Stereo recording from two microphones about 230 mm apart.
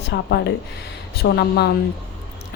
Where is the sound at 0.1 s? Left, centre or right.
Left.